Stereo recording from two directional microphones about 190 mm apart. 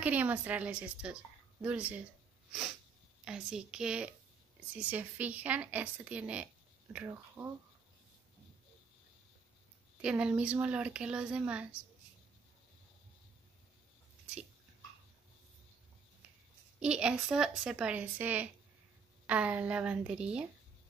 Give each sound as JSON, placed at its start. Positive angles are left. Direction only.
{"t": 0.0, "sound": "speech", "side_deg": -10}
{"t": 3.3, "sound": "a woman's voice", "side_deg": -5}
{"t": 10.0, "sound": "a woman's voice", "side_deg": -5}
{"t": 16.8, "sound": "a woman's voice", "side_deg": -5}